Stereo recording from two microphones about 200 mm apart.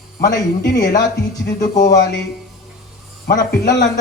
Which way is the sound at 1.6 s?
45° left (ahead or behind).